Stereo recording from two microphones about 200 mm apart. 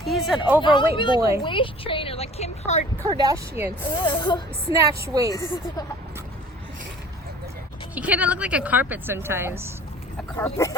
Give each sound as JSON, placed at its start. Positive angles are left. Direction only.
{"t": 0.0, "sound": "a sound", "side_deg": 0}
{"t": 0.6, "sound": "a woman's voice", "side_deg": 25}
{"t": 3.1, "sound": "a woman's voice", "side_deg": -20}
{"t": 3.8, "sound": "a woman's voice", "side_deg": 25}
{"t": 5.0, "sound": "a woman's voice", "side_deg": -15}
{"t": 5.3, "sound": "a woman's voice", "side_deg": 20}
{"t": 7.9, "sound": "a woman's voice", "side_deg": -5}
{"t": 10.3, "sound": "speech", "side_deg": 15}